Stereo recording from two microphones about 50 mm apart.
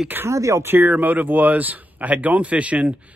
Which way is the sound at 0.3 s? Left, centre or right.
Right.